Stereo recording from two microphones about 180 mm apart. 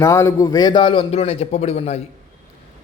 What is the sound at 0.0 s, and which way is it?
Speech, 15° left (ahead or behind).